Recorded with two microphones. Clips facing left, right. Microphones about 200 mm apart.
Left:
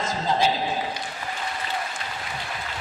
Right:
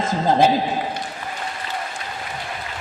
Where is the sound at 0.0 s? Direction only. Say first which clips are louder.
Right 6 dB; 55° right (ahead or behind).